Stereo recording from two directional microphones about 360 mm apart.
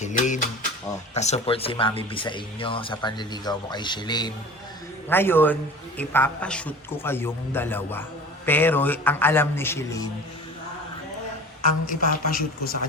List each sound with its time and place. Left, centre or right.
0.0 s a sound: centre
0.9 s a man's voice: centre
11.9 s speech: left